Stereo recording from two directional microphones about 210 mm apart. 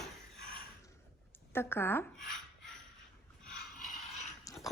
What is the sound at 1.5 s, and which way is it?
Speech, 10° left (ahead or behind).